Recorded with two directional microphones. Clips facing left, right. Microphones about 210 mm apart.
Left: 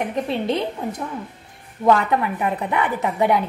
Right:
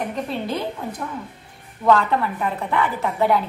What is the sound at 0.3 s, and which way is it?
A woman's voice, 25° left (ahead or behind).